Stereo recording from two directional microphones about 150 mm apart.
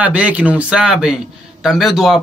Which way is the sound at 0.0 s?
10° right (ahead or behind).